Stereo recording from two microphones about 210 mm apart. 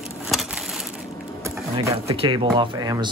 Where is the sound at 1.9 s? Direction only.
30° right (ahead or behind).